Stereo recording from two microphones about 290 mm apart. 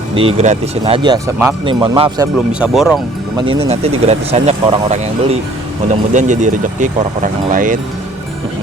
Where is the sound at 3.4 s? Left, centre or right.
Centre.